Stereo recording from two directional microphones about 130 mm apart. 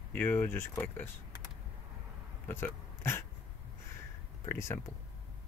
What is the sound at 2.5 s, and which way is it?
Speech, 20° left (ahead or behind).